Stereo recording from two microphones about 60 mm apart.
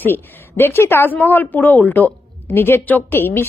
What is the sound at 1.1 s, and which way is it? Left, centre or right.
Speech, left.